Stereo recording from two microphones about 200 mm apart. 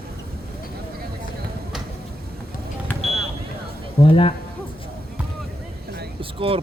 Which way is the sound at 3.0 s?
30° right (ahead or behind).